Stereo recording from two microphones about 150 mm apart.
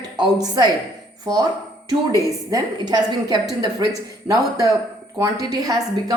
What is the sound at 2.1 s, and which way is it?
A woman's voice, 25° right (ahead or behind).